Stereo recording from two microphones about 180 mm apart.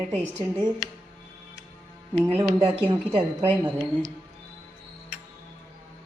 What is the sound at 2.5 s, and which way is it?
Speech, 30° right (ahead or behind).